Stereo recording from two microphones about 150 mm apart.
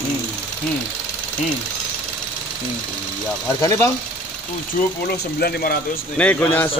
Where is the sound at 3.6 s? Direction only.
20° left (ahead or behind).